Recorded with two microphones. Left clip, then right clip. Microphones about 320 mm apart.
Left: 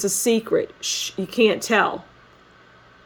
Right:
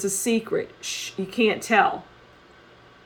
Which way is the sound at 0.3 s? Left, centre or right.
Left.